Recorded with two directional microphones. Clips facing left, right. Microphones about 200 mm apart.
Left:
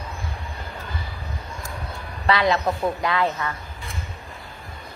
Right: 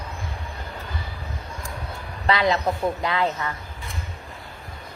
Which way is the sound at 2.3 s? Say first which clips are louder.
Left 1 dB; 20° right (ahead or behind).